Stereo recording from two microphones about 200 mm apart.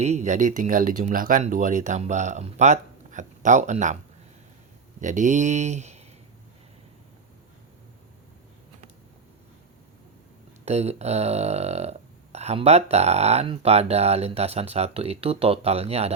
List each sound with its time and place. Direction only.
0.0 s speech: 35° right (ahead or behind)
4.9 s speech: 40° right (ahead or behind)
10.7 s speech: 30° right (ahead or behind)